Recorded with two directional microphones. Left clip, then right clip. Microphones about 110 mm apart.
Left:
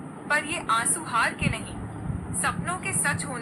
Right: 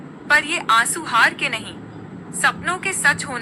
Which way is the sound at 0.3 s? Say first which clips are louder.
Right 8 dB; 40° right (ahead or behind).